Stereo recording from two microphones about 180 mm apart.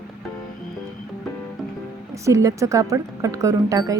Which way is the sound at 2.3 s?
15° right (ahead or behind).